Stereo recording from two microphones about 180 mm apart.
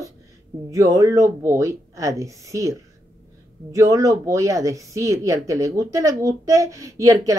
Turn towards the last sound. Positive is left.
turn(degrees=-20)  # may be behind; listen again after turning